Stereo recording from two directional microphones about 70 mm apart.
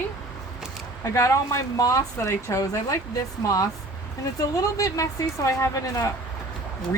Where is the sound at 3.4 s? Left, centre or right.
Left.